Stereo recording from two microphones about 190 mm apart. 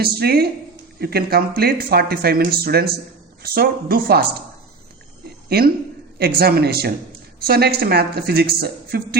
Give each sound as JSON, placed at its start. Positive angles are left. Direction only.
{"t": 0.0, "sound": "speech", "side_deg": -55}
{"t": 5.5, "sound": "speech", "side_deg": -55}